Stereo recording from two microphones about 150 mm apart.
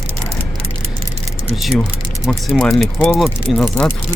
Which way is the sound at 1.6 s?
Centre (ahead or behind).